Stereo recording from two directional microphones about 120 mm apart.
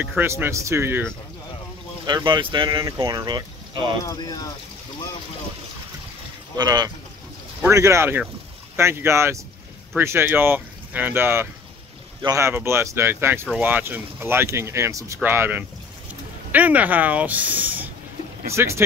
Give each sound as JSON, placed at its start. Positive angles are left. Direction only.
{"t": 0.2, "sound": "speech", "side_deg": -20}
{"t": 2.0, "sound": "speech", "side_deg": -40}
{"t": 2.8, "sound": "speech", "side_deg": -25}
{"t": 4.0, "sound": "speech", "side_deg": 30}
{"t": 6.5, "sound": "speech", "side_deg": -35}
{"t": 7.6, "sound": "speech", "side_deg": -25}